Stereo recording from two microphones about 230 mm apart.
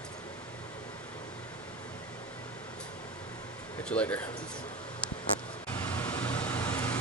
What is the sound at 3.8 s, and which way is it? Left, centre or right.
Speech, centre.